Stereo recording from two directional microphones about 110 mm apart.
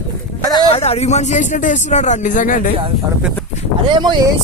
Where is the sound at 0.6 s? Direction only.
65° left (ahead or behind); by 2.2 s 90° left.